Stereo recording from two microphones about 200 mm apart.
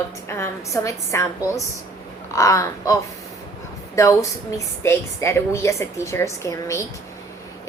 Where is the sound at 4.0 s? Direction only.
15° left (ahead or behind).